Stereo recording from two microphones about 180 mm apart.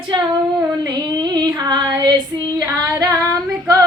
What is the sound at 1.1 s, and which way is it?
Female singing, 25° right (ahead or behind).